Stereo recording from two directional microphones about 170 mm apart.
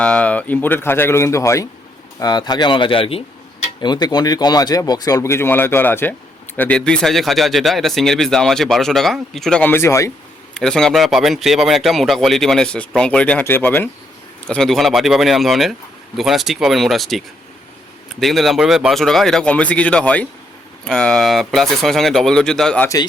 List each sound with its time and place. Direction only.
0.0 s speech: 5° left (ahead or behind)
10.5 s speech: 5° left (ahead or behind)